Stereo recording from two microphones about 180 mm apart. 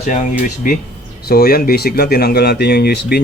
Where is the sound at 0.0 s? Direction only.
45° left (ahead or behind).